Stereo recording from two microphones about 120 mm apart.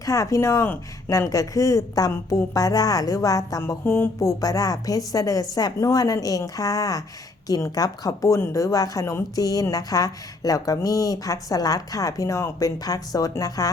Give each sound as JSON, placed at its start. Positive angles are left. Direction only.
{"t": 0.0, "sound": "speech", "side_deg": 25}